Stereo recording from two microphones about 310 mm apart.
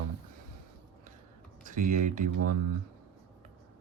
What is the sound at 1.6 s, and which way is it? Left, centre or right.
Speech, right.